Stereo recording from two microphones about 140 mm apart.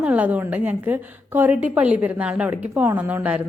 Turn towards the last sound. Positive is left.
turn(degrees=-10)  # may be behind; listen again after turning